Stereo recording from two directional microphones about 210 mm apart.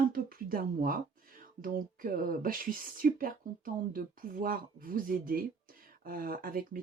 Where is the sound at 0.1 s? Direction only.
45° right (ahead or behind).